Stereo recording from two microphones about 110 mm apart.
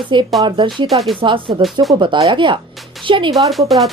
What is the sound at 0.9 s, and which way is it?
Speech, centre (ahead or behind).